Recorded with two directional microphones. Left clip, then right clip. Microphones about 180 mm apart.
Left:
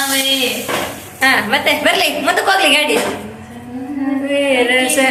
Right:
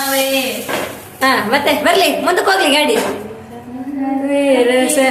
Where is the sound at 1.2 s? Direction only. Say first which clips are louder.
Even; 30° right (ahead or behind).